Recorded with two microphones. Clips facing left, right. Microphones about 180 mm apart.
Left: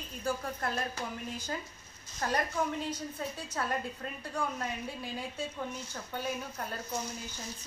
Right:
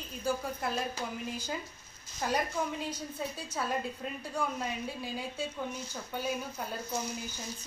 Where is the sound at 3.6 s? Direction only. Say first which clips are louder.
Right 1 dB; 5° right (ahead or behind).